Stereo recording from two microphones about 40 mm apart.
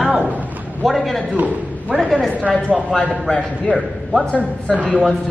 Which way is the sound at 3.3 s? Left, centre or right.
Left.